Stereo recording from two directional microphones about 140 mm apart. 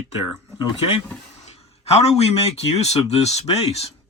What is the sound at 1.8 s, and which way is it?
A man's voice, 45° left (ahead or behind).